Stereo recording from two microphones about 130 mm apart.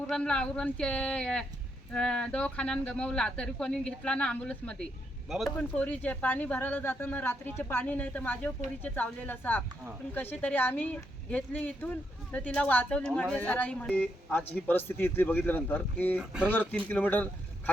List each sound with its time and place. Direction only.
0.1 s speech: 5° left (ahead or behind)
5.5 s speech: 10° left (ahead or behind)